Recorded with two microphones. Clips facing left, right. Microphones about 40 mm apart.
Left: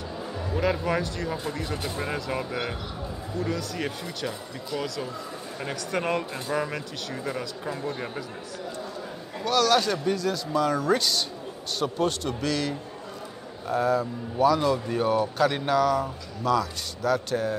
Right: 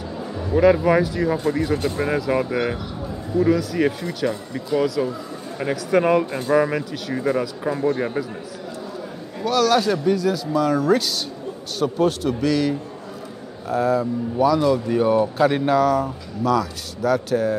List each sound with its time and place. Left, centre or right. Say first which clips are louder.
0.4 s speech: right 11 dB; centre
9.4 s speech: right 4 dB; centre
14.9 s speech: right 6 dB; centre